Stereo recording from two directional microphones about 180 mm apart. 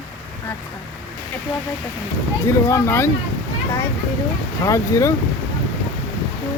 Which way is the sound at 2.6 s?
15° left (ahead or behind).